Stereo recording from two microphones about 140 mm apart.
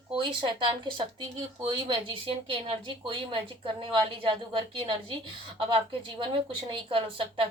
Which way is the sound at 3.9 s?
35° right (ahead or behind).